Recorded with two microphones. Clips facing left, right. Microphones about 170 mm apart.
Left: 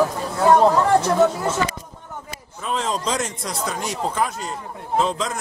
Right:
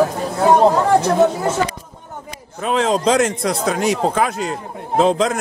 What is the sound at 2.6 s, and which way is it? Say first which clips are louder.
Speech: right 7 dB; 75° right (ahead or behind).